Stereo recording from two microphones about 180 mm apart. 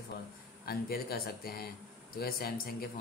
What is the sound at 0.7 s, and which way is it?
Speech, 60° left (ahead or behind).